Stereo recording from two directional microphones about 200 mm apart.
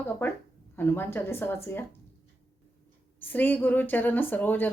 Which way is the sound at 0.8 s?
10° left (ahead or behind).